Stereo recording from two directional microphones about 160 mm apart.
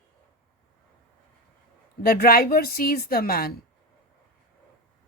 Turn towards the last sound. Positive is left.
turn(degrees=70)  # may be behind; listen again after turning